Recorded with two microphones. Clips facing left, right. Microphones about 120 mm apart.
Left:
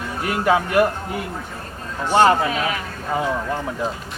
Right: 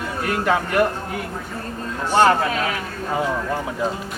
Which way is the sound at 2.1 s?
5° left (ahead or behind).